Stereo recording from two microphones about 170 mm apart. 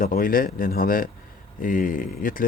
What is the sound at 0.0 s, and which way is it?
Speech, 55° left (ahead or behind).